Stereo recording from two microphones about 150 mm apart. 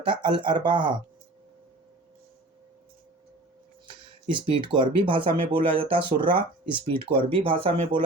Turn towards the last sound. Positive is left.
turn(degrees=-35)  # may be behind; listen again after turning